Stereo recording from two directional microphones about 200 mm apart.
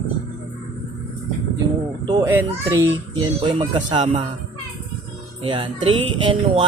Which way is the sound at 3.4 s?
30° right (ahead or behind).